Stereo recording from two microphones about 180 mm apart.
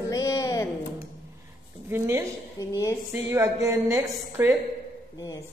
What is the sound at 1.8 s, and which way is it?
Speech, 15° right (ahead or behind).